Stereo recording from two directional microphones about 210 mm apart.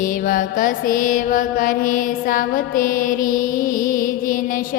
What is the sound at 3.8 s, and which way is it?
Music, 40° left (ahead or behind).